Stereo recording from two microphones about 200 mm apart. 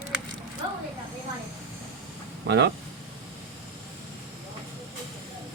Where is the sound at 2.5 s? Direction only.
60° right (ahead or behind).